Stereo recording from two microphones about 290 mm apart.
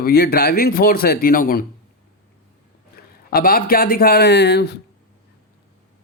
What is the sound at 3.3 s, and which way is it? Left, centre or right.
Speech, left.